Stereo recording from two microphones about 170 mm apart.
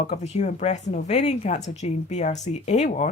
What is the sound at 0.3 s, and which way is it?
A woman's voice, 40° left (ahead or behind).